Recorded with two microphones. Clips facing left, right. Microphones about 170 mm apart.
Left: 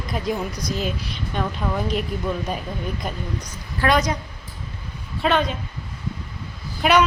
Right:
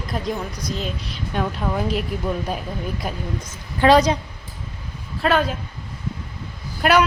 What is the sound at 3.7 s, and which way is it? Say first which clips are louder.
Speech: right 6 dB; 30° right (ahead or behind).